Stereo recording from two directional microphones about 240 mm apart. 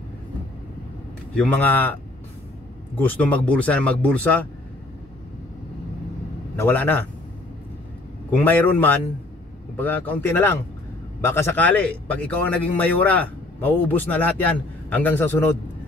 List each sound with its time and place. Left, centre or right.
1.3 s a man's voice: centre
3.0 s speech: centre
6.5 s a man's voice: centre
8.3 s a man's voice: centre